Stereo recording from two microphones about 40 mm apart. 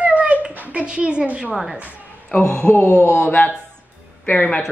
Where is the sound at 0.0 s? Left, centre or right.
Right.